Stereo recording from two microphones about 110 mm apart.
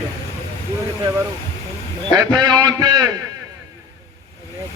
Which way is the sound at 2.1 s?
40° right (ahead or behind).